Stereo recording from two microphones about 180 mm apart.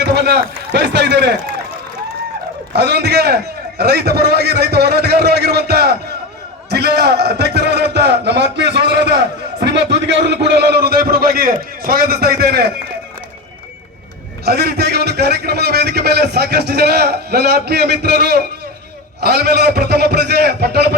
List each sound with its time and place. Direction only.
0.0 s speech: 65° right (ahead or behind)
2.7 s a man's voice: 65° right (ahead or behind)
14.4 s a man's voice: 60° right (ahead or behind)